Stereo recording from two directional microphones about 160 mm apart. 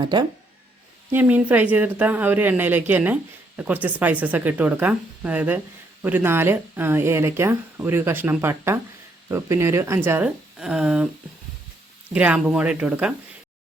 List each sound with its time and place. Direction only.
0.0 s speech: 30° right (ahead or behind)
1.1 s speech: 10° right (ahead or behind)
12.1 s speech: 5° right (ahead or behind)